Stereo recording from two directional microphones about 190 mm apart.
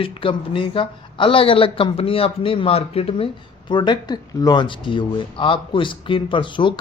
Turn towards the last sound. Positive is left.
turn(degrees=25)  # may be behind; listen again after turning